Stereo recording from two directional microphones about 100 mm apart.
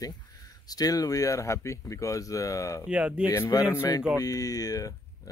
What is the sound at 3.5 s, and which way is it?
Speech, 40° left (ahead or behind).